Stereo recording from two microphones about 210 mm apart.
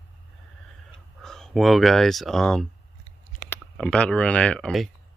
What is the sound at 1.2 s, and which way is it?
Speech, centre (ahead or behind).